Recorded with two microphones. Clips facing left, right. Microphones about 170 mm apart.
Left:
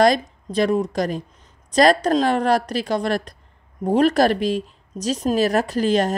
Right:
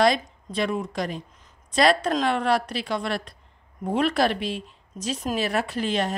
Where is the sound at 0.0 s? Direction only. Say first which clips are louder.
Left 4 dB; 40° left (ahead or behind).